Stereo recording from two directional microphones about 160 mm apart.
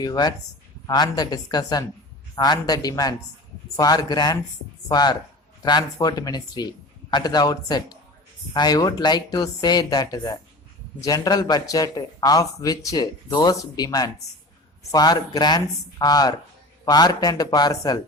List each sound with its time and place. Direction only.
0.0 s speech: 25° left (ahead or behind)